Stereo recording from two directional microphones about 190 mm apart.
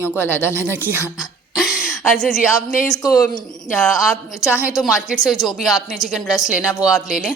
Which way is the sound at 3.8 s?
Centre (ahead or behind).